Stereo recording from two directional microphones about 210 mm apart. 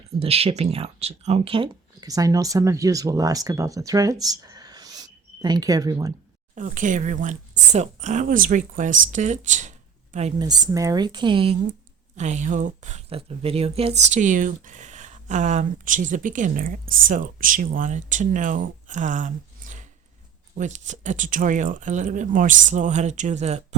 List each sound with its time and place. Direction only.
0.2 s speech: 30° right (ahead or behind)
6.6 s speech: 40° right (ahead or behind)
10.4 s a woman's voice: 20° right (ahead or behind)
12.1 s speech: 35° right (ahead or behind)